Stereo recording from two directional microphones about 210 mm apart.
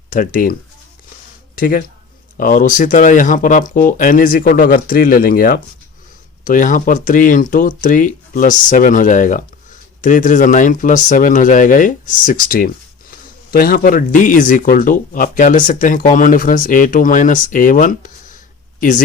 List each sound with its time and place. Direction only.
0.1 s speech: 40° left (ahead or behind)
1.5 s speech: 40° left (ahead or behind)